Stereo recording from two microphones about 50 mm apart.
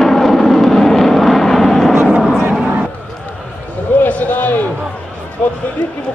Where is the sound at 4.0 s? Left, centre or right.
Left.